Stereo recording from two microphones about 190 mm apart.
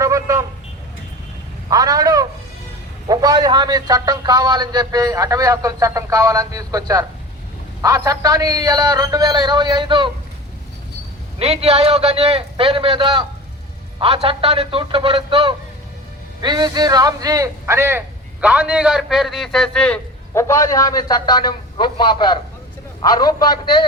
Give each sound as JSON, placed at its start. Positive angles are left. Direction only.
{"t": 0.0, "sound": "vehicle", "side_deg": -15}
{"t": 1.7, "sound": "a sound", "side_deg": -20}
{"t": 3.1, "sound": "a man's voice", "side_deg": -20}
{"t": 11.3, "sound": "a man's voice", "side_deg": -30}